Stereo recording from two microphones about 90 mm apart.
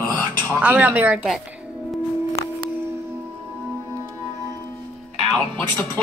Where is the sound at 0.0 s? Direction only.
40° right (ahead or behind).